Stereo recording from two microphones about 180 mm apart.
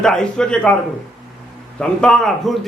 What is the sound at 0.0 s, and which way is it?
Speech, 5° left (ahead or behind).